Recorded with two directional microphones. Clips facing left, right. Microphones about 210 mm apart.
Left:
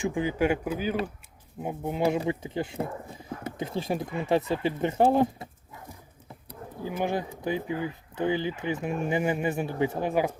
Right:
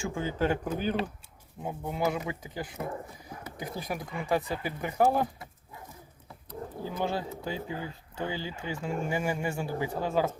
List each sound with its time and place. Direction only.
0.0 s speech: 15° left (ahead or behind)
1.6 s speech: 20° left (ahead or behind)
6.9 s speech: 15° left (ahead or behind)